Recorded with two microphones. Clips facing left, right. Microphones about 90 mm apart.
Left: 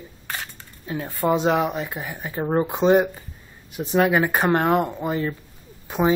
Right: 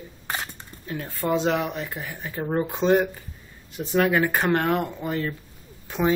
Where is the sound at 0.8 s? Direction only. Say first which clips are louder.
Left 4 dB; 15° left (ahead or behind).